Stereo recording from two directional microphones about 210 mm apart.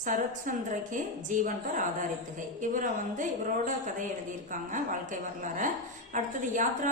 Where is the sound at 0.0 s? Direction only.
40° right (ahead or behind).